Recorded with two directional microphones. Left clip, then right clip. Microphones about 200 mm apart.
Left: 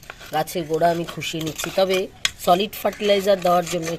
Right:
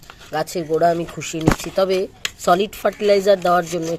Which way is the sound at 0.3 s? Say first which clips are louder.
Right 2 dB; 10° right (ahead or behind).